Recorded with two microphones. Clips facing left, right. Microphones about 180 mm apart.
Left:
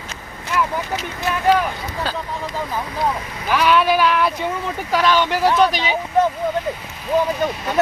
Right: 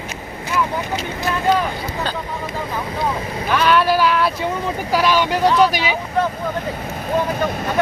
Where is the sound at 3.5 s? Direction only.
Centre (ahead or behind).